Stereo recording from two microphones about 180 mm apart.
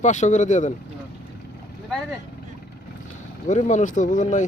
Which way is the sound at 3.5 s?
40° left (ahead or behind).